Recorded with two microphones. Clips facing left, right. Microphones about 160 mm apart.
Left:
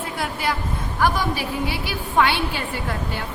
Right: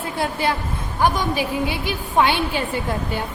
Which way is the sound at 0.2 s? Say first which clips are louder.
Right 4 dB; 25° right (ahead or behind).